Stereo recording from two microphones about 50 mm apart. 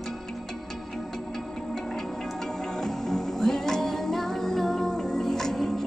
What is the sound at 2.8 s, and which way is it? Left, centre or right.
Music, centre.